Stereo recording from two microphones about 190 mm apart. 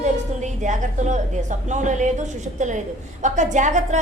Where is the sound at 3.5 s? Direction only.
40° right (ahead or behind).